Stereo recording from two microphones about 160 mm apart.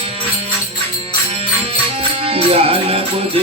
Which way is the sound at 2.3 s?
35° right (ahead or behind).